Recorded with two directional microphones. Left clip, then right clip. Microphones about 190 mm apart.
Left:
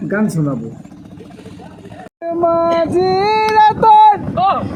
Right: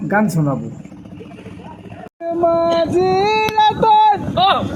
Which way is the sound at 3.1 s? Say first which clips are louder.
Left 5 dB; 25° left (ahead or behind).